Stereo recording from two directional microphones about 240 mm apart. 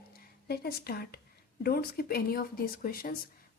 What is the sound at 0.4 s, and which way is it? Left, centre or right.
Speech, left.